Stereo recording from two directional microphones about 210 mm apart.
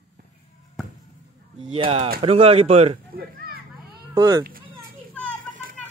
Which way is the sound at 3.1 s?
45° right (ahead or behind).